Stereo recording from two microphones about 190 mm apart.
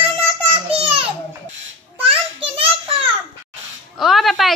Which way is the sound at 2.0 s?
30° right (ahead or behind).